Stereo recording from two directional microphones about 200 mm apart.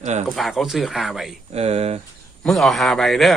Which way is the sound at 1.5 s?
30° right (ahead or behind).